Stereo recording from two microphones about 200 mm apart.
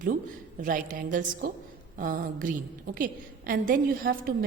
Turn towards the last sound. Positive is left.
turn(degrees=-50)  # may be behind; listen again after turning